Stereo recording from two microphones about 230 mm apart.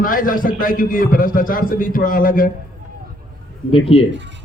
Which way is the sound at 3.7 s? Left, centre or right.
Left.